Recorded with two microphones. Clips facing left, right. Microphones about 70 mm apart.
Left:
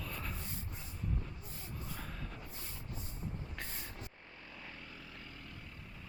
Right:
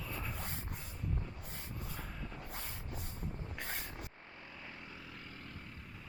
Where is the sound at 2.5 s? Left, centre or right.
Right.